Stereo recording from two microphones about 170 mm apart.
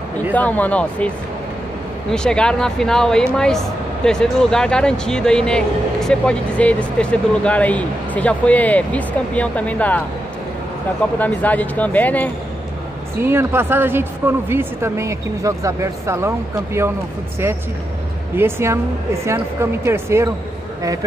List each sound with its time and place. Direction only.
0.3 s speech: 10° left (ahead or behind)
11.1 s speech: 10° left (ahead or behind)
13.2 s a woman's voice: 15° right (ahead or behind)
18.3 s a woman's voice: 15° right (ahead or behind)